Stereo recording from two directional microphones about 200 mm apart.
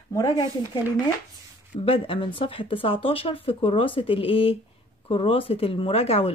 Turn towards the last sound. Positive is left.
turn(degrees=30)  # may be behind; listen again after turning